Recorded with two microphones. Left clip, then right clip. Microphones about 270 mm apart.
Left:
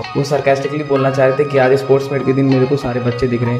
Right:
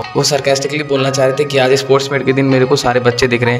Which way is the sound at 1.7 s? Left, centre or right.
Right.